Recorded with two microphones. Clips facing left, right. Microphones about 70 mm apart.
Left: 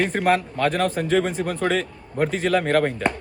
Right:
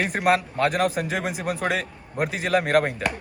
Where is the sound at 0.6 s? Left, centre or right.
Centre.